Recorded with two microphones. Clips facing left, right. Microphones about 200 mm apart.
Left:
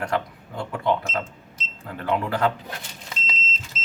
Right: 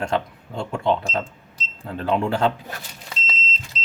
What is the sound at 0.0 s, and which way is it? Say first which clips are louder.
Speech: right 2 dB; 25° right (ahead or behind).